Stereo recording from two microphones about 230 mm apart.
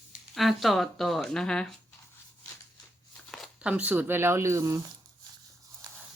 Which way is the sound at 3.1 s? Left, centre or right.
Centre.